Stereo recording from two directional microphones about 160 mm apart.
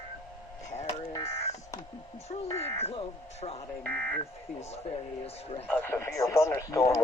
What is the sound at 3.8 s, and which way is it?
Speech, 5° left (ahead or behind).